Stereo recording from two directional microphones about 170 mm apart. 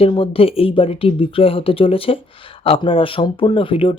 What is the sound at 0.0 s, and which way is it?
Speech, 35° left (ahead or behind).